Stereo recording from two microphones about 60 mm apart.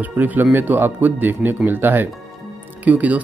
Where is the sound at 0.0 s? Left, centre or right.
Right.